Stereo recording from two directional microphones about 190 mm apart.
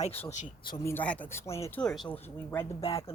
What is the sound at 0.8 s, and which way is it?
Speech, 10° left (ahead or behind).